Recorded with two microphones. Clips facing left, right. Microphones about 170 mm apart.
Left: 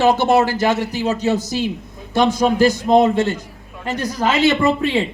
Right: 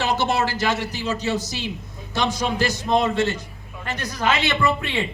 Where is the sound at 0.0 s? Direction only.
50° left (ahead or behind).